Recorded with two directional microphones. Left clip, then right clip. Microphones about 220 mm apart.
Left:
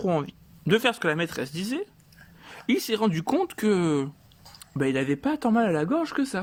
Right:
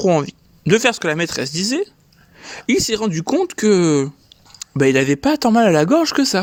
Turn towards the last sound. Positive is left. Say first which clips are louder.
# right 11 dB
turn(degrees=-35)  # may be behind; listen again after turning